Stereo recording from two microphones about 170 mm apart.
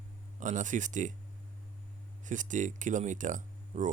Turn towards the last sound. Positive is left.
turn(degrees=-45)  # may be behind; listen again after turning